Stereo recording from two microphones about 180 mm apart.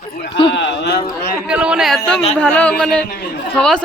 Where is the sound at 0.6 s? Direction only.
70° left (ahead or behind).